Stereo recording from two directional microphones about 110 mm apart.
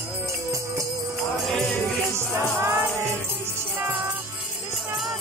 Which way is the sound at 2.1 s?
25° right (ahead or behind).